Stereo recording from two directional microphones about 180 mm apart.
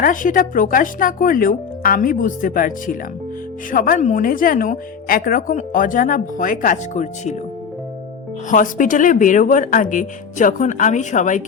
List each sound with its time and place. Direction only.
0.0 s speech: 50° left (ahead or behind)
8.4 s speech: 50° left (ahead or behind)